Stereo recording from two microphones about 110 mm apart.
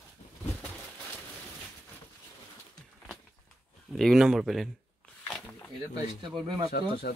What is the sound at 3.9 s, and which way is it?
Speech, centre (ahead or behind).